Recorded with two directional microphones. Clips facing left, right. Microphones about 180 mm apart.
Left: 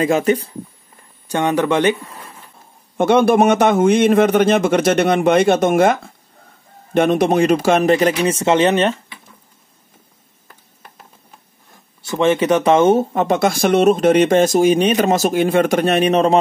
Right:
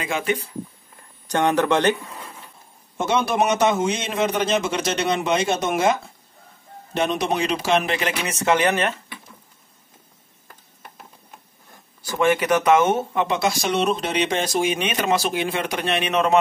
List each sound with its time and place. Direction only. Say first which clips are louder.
0.0 s speech: left 9 dB; 40° left (ahead or behind)
1.3 s speech: left 2 dB; 10° left (ahead or behind)
3.0 s a man's voice: left 8 dB; 55° left (ahead or behind); by 8.9 s 25° left (ahead or behind)
12.0 s speech: left 4 dB; 25° left (ahead or behind)
13.1 s speech: left 5 dB; 45° left (ahead or behind)